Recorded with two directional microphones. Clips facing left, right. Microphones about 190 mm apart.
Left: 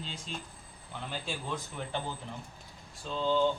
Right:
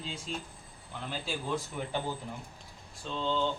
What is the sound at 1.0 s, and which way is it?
Speech, centre (ahead or behind).